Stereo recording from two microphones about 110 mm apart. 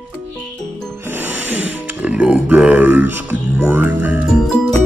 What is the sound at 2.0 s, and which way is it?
Grunt, 10° right (ahead or behind).